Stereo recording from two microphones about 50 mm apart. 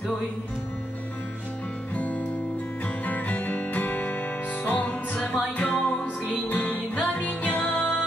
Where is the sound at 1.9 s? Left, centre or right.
Left.